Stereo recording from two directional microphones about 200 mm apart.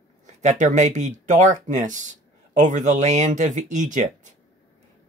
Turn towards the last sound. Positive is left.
turn(degrees=-35)  # may be behind; listen again after turning